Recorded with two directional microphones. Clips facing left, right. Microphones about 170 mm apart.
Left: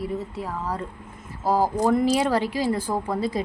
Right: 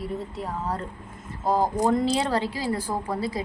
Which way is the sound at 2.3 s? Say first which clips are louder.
Left 3 dB; 15° left (ahead or behind).